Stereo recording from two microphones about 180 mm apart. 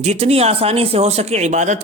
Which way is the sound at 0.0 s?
35° right (ahead or behind).